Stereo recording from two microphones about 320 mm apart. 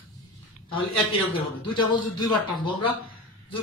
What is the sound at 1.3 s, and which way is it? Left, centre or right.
Speech, centre.